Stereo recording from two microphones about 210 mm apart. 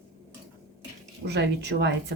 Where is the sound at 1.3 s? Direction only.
55° right (ahead or behind).